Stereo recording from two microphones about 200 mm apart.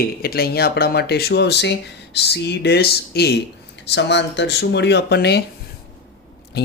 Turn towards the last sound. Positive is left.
turn(degrees=55)  # may be behind; listen again after turning